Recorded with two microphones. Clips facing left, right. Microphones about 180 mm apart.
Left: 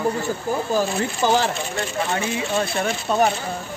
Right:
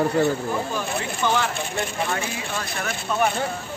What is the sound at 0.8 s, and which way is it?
Speech, 35° left (ahead or behind).